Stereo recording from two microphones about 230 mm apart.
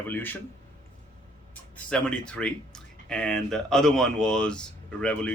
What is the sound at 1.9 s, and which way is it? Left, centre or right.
Speech, centre.